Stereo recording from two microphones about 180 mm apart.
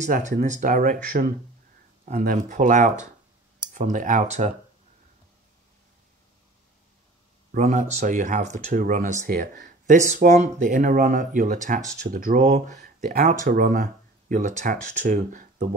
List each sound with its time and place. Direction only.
0.0 s speech: 45° right (ahead or behind)
7.5 s speech: 40° right (ahead or behind)